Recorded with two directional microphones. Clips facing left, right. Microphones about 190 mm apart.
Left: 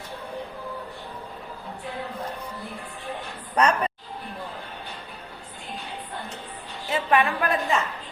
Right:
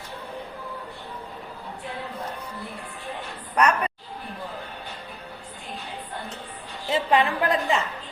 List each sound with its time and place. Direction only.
3.5 s a woman's voice: 30° left (ahead or behind)
6.8 s a woman's voice: 20° right (ahead or behind)